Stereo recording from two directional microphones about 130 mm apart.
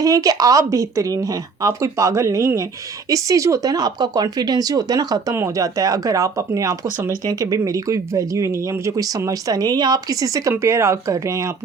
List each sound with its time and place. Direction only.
0.0 s speech: 25° right (ahead or behind)